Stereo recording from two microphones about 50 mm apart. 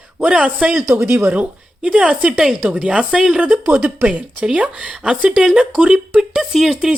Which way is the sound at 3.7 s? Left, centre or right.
Right.